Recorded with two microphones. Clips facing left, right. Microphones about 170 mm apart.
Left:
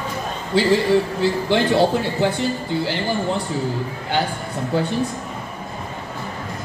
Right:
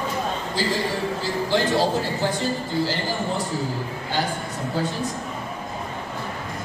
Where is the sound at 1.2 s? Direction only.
65° left (ahead or behind).